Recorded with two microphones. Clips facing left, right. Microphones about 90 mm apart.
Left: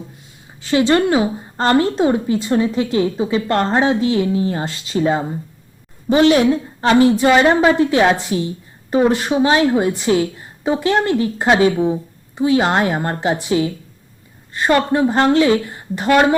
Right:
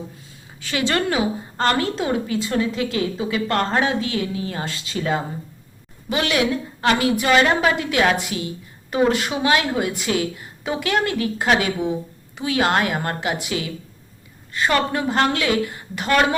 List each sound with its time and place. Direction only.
0.6 s a woman's voice: 25° left (ahead or behind)
6.1 s a woman's voice: 40° left (ahead or behind)
6.8 s a woman's voice: 30° left (ahead or behind)
14.5 s a woman's voice: 25° left (ahead or behind)